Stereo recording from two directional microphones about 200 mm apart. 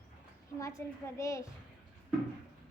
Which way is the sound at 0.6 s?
15° left (ahead or behind).